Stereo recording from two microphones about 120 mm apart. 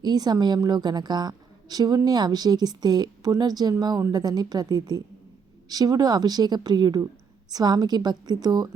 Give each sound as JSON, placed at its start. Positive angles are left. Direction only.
{"t": 0.0, "sound": "a woman's voice", "side_deg": -35}